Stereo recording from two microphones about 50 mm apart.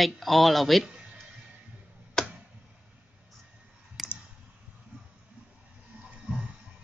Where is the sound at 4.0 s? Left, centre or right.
Centre.